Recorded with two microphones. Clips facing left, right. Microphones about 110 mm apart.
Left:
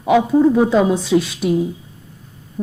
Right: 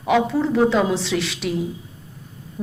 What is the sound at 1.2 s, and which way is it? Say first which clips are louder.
Speech: left 1 dB; 90° right.